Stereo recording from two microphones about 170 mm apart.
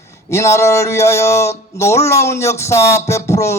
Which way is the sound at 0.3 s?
15° left (ahead or behind).